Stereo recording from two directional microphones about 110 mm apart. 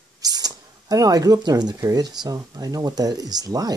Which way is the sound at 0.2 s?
35° right (ahead or behind).